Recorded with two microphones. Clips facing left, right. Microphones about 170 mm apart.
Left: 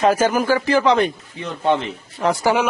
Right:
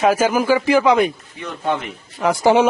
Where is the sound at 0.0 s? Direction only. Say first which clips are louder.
Right 1 dB; 10° right (ahead or behind).